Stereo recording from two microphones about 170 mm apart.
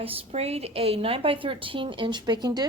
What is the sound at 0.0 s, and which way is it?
A woman's voice, 35° right (ahead or behind).